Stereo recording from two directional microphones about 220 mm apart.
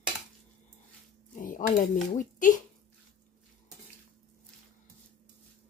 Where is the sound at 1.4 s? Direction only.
35° left (ahead or behind).